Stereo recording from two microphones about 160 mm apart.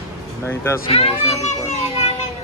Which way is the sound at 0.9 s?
40° left (ahead or behind).